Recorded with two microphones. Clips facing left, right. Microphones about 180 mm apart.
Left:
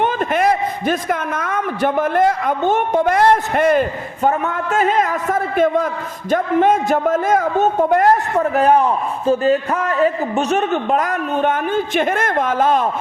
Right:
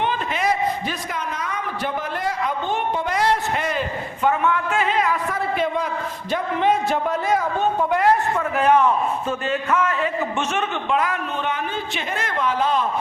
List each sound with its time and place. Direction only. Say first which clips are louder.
0.0 s a woman's voice: left 6 dB; 50° left (ahead or behind)